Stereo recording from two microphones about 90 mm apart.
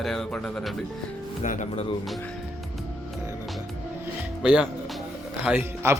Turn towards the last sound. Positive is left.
turn(degrees=-30)  # may be behind; listen again after turning